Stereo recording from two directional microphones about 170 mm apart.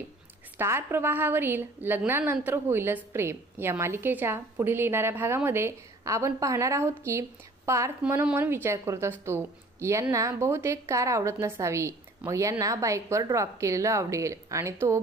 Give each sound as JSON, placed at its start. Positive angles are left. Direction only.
{"t": 0.6, "sound": "a woman's voice", "side_deg": -15}